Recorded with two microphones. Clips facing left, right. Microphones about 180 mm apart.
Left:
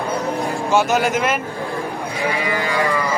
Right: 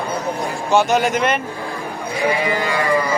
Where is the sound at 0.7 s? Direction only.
5° left (ahead or behind).